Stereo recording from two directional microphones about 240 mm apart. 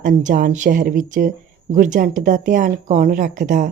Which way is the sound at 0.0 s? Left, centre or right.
Right.